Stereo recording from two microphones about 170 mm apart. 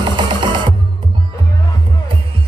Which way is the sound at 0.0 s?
30° right (ahead or behind).